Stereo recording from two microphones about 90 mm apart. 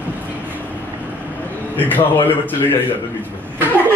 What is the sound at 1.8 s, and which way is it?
A man's voice, 20° left (ahead or behind).